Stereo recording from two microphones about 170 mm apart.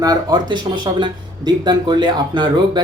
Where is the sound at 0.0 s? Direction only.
20° right (ahead or behind).